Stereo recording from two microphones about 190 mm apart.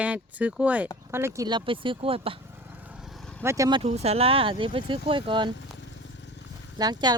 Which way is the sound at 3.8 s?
35° right (ahead or behind).